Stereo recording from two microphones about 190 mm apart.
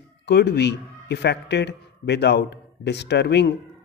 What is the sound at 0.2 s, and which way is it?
A man's voice, 60° left (ahead or behind).